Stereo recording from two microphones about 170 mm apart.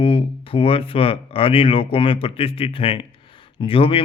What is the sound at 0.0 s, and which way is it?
Speech, 35° left (ahead or behind).